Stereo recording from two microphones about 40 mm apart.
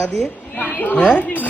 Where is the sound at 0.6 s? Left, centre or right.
Left.